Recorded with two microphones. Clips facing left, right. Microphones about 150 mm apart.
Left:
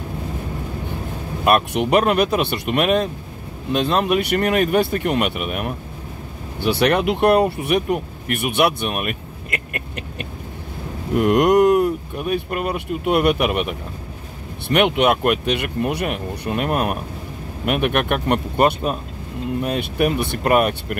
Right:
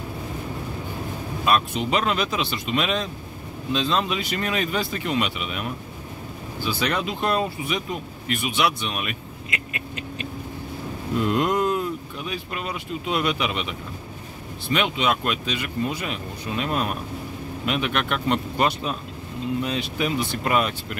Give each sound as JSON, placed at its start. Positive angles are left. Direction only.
{"t": 1.4, "sound": "speech", "side_deg": 60}
{"t": 11.1, "sound": "speech", "side_deg": 65}